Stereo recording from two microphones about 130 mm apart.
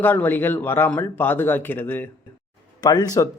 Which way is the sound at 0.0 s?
15° left (ahead or behind).